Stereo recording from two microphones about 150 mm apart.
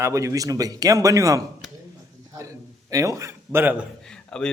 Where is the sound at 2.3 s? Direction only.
20° right (ahead or behind).